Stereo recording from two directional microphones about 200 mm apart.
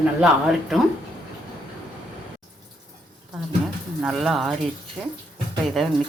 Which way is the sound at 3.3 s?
Centre (ahead or behind).